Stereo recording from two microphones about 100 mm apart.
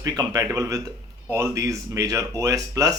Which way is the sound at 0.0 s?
40° right (ahead or behind).